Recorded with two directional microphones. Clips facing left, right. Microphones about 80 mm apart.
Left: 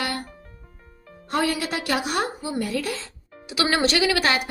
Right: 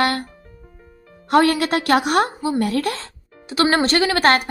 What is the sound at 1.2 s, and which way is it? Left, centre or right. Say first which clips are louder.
A woman's voice: right 8 dB; right.